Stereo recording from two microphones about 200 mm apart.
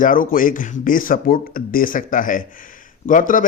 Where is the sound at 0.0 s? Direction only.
45° left (ahead or behind).